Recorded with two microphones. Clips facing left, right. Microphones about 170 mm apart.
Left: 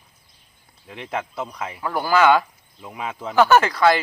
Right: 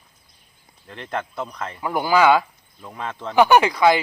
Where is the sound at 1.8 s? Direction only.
15° right (ahead or behind).